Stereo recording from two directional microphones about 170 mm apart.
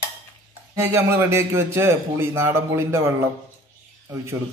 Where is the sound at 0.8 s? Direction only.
15° right (ahead or behind).